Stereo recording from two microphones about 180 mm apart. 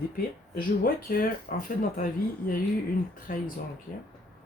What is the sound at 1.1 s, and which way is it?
Speech, 55° left (ahead or behind).